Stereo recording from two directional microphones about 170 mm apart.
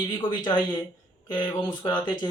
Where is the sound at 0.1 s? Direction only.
30° left (ahead or behind).